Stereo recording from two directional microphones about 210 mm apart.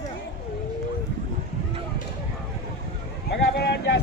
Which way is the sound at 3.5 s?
50° left (ahead or behind).